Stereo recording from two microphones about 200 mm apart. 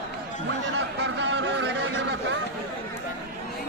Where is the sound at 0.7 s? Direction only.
60° right (ahead or behind).